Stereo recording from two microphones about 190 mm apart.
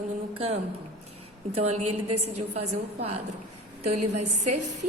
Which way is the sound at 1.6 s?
35° right (ahead or behind).